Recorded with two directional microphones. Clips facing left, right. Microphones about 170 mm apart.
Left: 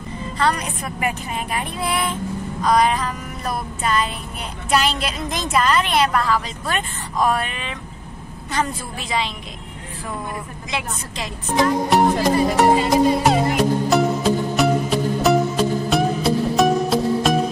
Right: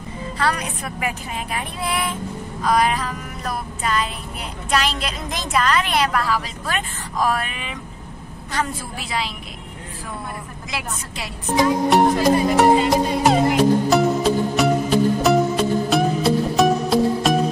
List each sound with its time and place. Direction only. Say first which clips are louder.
0.4 s a woman's voice: left 2 dB; centre (ahead or behind)
2.6 s female singing: left 1 dB; 5° right (ahead or behind)
4.6 s a woman's voice: left 2 dB; centre (ahead or behind)
10.7 s a woman's voice: left 2 dB; 5° right (ahead or behind)
12.5 s music: even; centre (ahead or behind)